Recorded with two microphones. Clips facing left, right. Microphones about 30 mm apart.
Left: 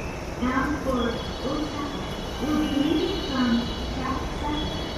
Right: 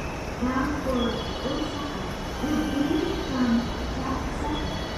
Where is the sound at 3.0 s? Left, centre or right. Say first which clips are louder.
Left 1 dB; left.